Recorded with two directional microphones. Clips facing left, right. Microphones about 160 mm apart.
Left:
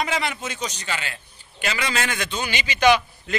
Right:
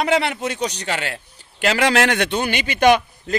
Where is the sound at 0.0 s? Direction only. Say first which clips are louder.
Right 6 dB; 65° right (ahead or behind).